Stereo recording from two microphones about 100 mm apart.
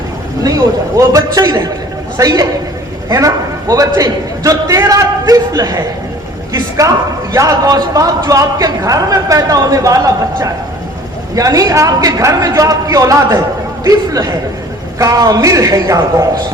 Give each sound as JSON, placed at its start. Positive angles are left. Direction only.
{"t": 0.4, "sound": "a man's voice", "side_deg": -35}
{"t": 6.5, "sound": "a sound", "side_deg": -35}
{"t": 7.3, "sound": "speech", "side_deg": -35}